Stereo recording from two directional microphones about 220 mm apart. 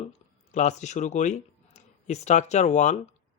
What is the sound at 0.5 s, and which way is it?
Speech, 35° left (ahead or behind).